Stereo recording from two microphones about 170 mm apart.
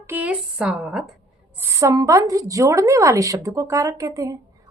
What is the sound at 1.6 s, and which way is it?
A woman's voice, 20° right (ahead or behind).